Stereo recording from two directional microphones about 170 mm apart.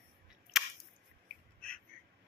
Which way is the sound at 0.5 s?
Centre (ahead or behind).